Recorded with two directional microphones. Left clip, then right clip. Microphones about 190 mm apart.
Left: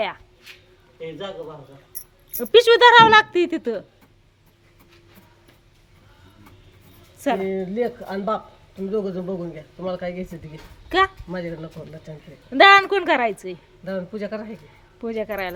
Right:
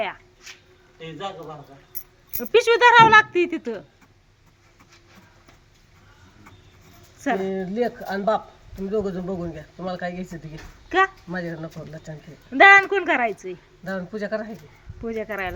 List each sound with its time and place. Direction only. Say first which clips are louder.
2.4 s speech: left 3 dB; 15° left (ahead or behind)
7.2 s speech: left 2 dB; 10° left (ahead or behind)
12.5 s speech: even; 15° left (ahead or behind)
13.8 s speech: left 1 dB; 5° left (ahead or behind)
15.0 s speech: left 2 dB; 15° left (ahead or behind)